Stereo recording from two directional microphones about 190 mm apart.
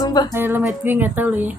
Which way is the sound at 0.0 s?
20° left (ahead or behind).